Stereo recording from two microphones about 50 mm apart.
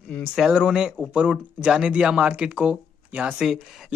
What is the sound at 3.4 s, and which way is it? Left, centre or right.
Speech, centre.